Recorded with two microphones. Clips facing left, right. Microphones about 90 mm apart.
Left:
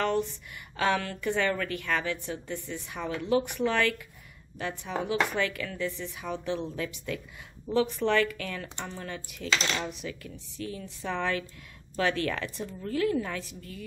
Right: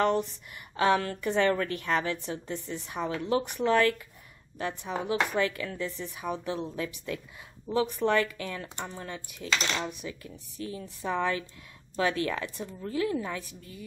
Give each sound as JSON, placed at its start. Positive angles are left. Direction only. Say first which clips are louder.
{"t": 0.0, "sound": "speech", "louder": "right 2 dB", "side_deg": -20}
{"t": 1.5, "sound": "a woman's voice", "louder": "right 2 dB", "side_deg": -35}
{"t": 1.9, "sound": "speech", "louder": "right 1 dB", "side_deg": -25}
{"t": 5.0, "sound": "speech", "louder": "right 1 dB", "side_deg": -30}
{"t": 7.7, "sound": "speech", "louder": "even", "side_deg": -20}
{"t": 10.6, "sound": "speech", "louder": "right 1 dB", "side_deg": -25}